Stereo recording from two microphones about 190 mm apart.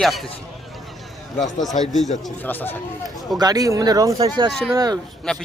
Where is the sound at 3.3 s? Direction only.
20° right (ahead or behind).